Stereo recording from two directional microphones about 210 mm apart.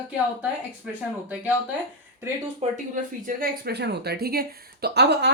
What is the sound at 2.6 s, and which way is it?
Speech, 35° right (ahead or behind).